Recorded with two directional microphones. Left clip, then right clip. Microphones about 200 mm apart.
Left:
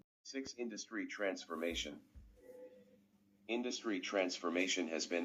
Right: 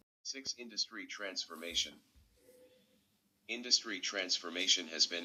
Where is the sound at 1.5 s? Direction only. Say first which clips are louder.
Left 6 dB; 15° left (ahead or behind).